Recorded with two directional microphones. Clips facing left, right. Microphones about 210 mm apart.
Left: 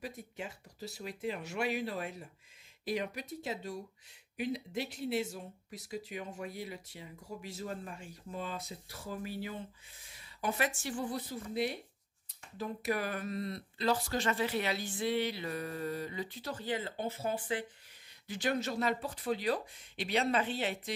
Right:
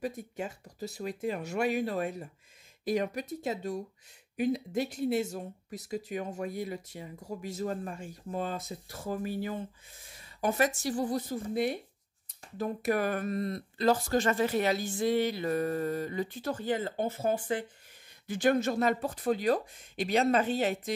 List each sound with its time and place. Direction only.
0.0 s speech: 45° right (ahead or behind)
12.5 s speech: 50° right (ahead or behind)